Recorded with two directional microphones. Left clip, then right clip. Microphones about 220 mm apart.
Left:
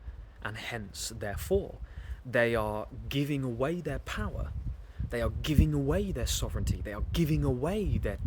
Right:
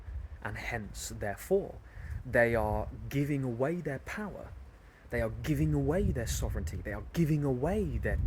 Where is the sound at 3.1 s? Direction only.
20° left (ahead or behind).